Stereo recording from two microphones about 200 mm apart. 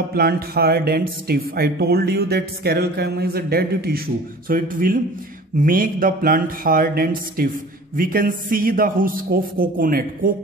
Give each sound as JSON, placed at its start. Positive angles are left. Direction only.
{"t": 0.1, "sound": "speech", "side_deg": -50}